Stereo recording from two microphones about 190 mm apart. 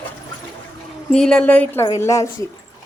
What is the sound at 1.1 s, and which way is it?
A woman's voice, 5° left (ahead or behind).